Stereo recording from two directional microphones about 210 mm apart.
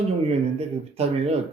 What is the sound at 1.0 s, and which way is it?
Speech, 30° right (ahead or behind).